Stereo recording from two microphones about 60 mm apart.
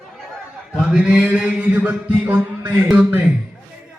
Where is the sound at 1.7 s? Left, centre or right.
Right.